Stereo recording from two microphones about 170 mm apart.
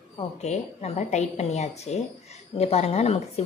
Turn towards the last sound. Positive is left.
turn(degrees=40)  # may be behind; listen again after turning